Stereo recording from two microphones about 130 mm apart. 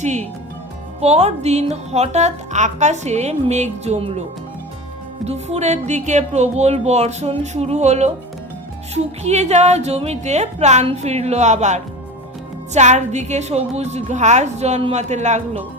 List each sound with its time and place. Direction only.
0.0 s speech: 60° right (ahead or behind)
5.2 s speech: 55° right (ahead or behind)
9.2 s speech: 60° right (ahead or behind)
15.0 s speech: 65° right (ahead or behind)